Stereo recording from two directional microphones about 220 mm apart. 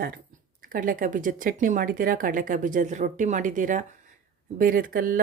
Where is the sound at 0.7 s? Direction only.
40° right (ahead or behind).